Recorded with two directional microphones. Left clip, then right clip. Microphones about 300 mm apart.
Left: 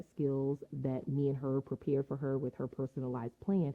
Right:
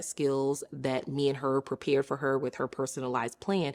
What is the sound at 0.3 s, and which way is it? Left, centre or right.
Speech, right.